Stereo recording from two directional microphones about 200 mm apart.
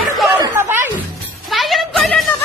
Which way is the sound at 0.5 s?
10° right (ahead or behind).